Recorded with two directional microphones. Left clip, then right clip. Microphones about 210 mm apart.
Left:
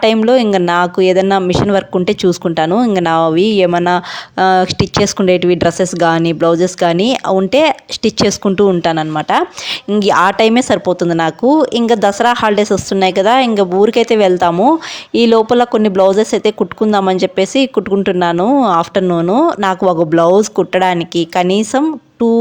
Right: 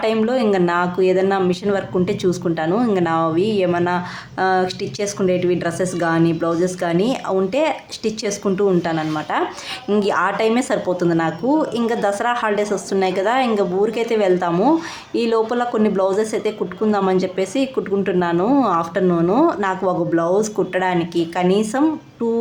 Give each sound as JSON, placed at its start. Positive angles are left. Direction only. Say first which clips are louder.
{"t": 0.0, "sound": "speech", "louder": "left 8 dB", "side_deg": 40}